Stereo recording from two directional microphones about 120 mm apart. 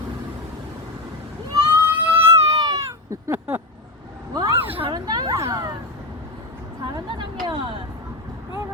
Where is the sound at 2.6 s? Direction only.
30° right (ahead or behind).